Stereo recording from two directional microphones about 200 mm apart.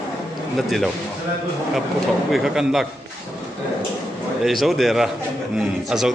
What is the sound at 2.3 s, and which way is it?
Speech, centre (ahead or behind).